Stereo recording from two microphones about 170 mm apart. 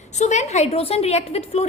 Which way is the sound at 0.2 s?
40° left (ahead or behind).